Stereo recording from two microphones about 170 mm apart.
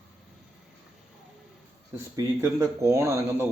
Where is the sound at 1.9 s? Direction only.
15° right (ahead or behind).